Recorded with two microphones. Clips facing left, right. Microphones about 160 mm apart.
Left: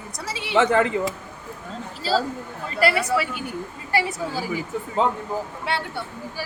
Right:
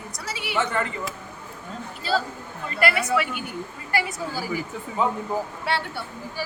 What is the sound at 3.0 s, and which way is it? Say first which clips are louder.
A woman's voice: left 1 dB; 30° left (ahead or behind).